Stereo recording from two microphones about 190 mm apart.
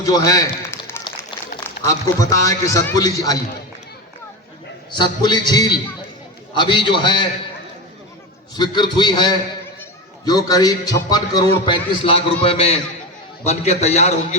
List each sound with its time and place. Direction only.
0.0 s a sound: 20° left (ahead or behind)
1.8 s a man's voice: 15° left (ahead or behind)
4.9 s a man's voice: 25° left (ahead or behind)
8.5 s a man's voice: 20° left (ahead or behind)